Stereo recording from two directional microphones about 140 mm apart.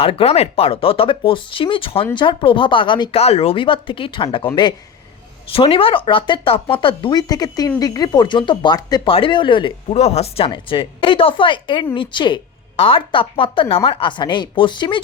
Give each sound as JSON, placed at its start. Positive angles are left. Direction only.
{"t": 0.0, "sound": "speech", "side_deg": 40}
{"t": 9.9, "sound": "speech", "side_deg": 50}